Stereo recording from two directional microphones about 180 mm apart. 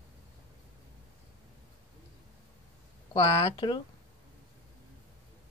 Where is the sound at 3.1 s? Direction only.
25° left (ahead or behind).